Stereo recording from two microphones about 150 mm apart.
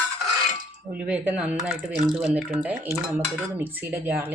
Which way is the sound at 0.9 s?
10° right (ahead or behind).